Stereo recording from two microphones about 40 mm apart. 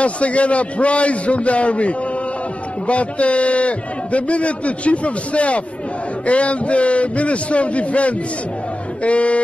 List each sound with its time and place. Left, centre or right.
0.0 s a man's voice: left